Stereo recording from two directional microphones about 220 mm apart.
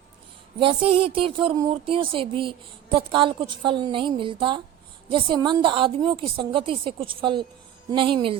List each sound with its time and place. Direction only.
0.6 s speech: 25° right (ahead or behind)